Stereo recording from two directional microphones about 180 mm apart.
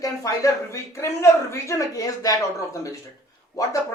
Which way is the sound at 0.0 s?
20° left (ahead or behind).